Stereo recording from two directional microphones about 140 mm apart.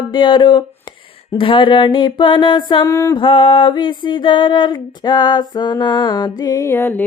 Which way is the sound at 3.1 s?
40° left (ahead or behind).